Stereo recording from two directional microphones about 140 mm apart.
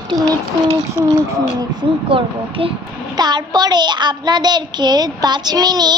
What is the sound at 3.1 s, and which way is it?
A child's voice, 30° right (ahead or behind).